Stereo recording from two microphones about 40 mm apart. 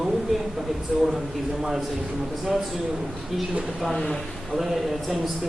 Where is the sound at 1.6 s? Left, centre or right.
Centre.